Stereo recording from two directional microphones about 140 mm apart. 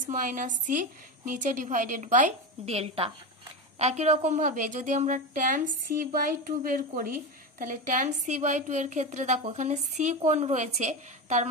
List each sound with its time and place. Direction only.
0.0 s a woman's voice: 65° right (ahead or behind); by 7.1 s 90° right
7.5 s a woman's voice: 70° right (ahead or behind)